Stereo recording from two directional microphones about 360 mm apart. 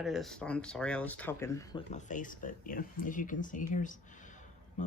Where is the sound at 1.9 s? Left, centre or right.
Centre.